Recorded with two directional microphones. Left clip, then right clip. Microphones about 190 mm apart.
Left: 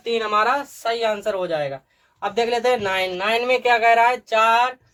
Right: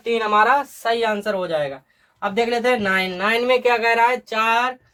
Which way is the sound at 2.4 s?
30° right (ahead or behind).